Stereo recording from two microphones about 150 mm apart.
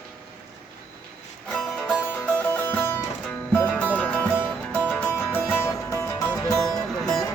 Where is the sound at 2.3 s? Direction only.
10° left (ahead or behind).